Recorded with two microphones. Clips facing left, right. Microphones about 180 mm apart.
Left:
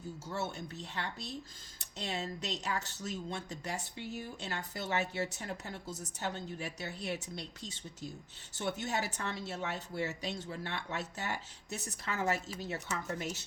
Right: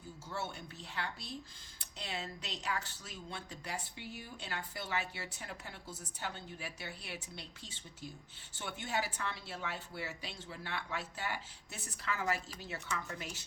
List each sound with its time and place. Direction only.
0.3 s speech: 40° left (ahead or behind)